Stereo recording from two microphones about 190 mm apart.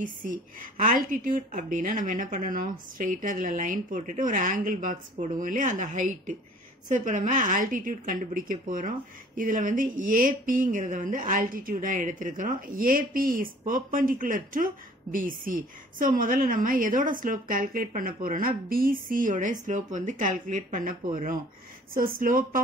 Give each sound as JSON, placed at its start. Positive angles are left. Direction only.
{"t": 0.0, "sound": "a woman's voice", "side_deg": -45}